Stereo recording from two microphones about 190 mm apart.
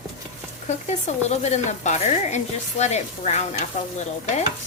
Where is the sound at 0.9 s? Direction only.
35° left (ahead or behind).